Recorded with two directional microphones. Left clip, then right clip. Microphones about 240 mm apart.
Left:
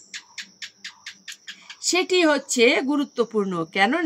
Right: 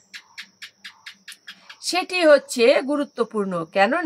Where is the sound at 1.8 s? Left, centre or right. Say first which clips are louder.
Right 1 dB; centre.